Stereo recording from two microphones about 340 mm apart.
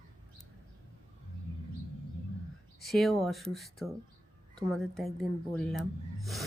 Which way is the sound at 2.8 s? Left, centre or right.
Centre.